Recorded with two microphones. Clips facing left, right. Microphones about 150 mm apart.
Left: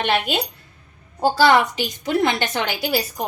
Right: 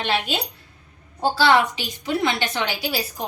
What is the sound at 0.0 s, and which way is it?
A woman's voice, 55° left (ahead or behind).